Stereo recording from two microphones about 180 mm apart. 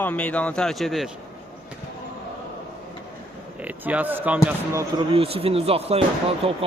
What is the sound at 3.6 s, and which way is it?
Speech, 10° right (ahead or behind).